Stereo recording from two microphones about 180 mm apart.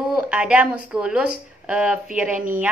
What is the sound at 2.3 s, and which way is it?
Speech, 45° right (ahead or behind).